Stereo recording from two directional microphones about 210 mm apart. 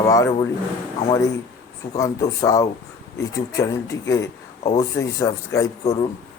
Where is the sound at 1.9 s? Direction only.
15° left (ahead or behind).